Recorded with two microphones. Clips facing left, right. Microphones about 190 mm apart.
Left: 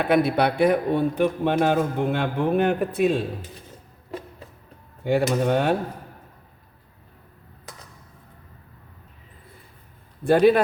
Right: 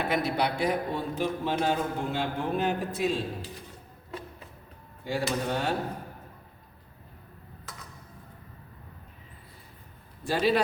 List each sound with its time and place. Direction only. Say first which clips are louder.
0.1 s a man's voice: left 8 dB; 60° left (ahead or behind)
5.0 s a man's voice: left 9 dB; 60° left (ahead or behind)
10.2 s a man's voice: left 9 dB; 55° left (ahead or behind)